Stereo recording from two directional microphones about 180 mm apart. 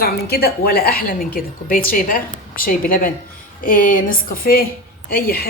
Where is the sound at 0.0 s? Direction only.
55° left (ahead or behind).